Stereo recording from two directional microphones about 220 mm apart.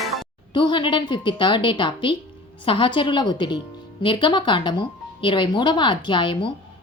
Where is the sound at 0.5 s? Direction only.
20° left (ahead or behind).